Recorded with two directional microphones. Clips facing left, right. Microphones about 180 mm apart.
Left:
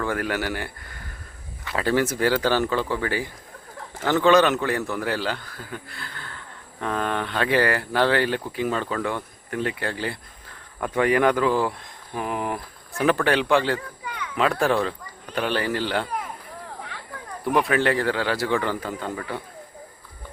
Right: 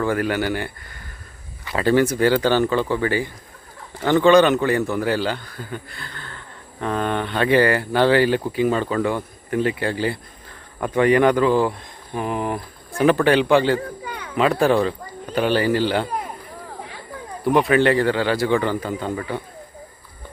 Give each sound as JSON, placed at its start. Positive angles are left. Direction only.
{"t": 0.0, "sound": "a man's voice", "side_deg": 0}
{"t": 13.7, "sound": "speech", "side_deg": -35}
{"t": 14.3, "sound": "a man's voice", "side_deg": 0}
{"t": 17.4, "sound": "a man's voice", "side_deg": 0}